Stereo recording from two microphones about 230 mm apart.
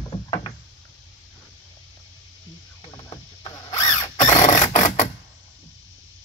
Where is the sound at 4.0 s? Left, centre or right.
Centre.